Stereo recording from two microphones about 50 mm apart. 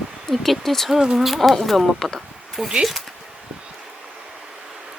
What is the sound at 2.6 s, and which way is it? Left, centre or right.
Speech, centre.